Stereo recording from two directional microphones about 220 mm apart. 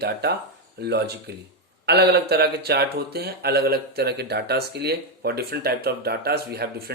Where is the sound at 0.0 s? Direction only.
50° right (ahead or behind).